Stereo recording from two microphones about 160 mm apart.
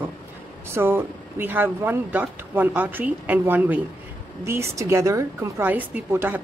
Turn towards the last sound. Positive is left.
turn(degrees=-10)  # may be behind; listen again after turning